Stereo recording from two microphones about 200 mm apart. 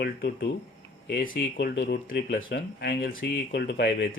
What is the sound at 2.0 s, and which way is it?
Speech, 45° left (ahead or behind).